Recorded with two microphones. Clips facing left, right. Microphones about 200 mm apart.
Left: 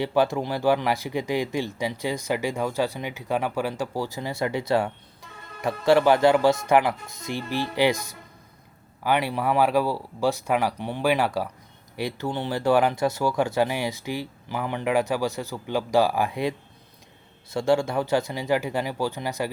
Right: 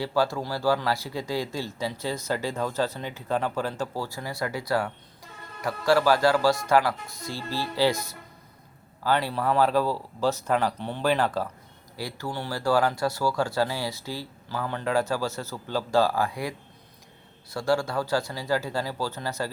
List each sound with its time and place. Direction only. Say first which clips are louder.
0.0 s speech: left 3 dB; 20° left (ahead or behind)